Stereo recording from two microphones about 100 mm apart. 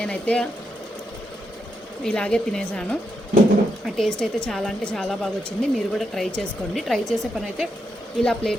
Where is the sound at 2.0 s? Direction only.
10° left (ahead or behind).